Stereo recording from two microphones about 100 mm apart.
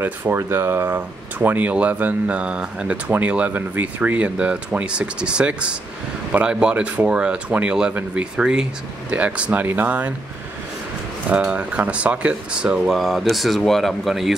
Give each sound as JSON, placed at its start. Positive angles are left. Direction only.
{"t": 0.0, "sound": "speech", "side_deg": -20}
{"t": 11.2, "sound": "speech", "side_deg": -15}